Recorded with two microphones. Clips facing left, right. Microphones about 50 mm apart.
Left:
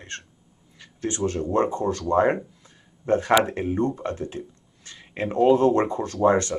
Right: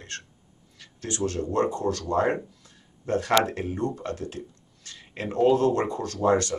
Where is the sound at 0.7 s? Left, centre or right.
Left.